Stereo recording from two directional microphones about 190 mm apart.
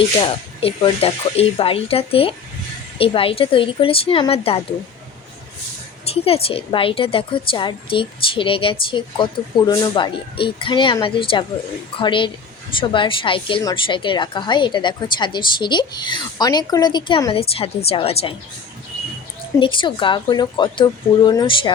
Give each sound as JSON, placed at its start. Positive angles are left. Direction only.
{"t": 0.2, "sound": "a woman's voice", "side_deg": 25}
{"t": 6.2, "sound": "a woman's voice", "side_deg": 30}
{"t": 19.5, "sound": "a woman's voice", "side_deg": 25}